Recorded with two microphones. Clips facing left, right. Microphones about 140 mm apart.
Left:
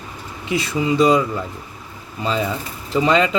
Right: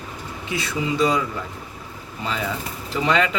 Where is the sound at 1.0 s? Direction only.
20° left (ahead or behind).